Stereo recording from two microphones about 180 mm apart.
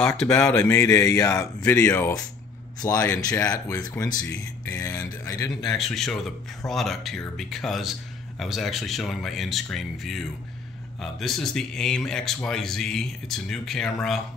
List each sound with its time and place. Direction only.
0.0 s speech: 5° left (ahead or behind)
5.5 s speech: centre (ahead or behind)